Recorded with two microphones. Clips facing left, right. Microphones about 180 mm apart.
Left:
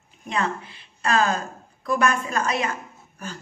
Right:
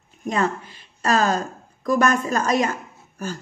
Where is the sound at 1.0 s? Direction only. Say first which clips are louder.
Right 2 dB; 40° right (ahead or behind).